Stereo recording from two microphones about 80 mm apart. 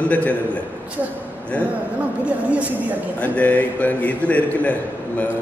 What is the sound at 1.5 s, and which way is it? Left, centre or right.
Speech, centre.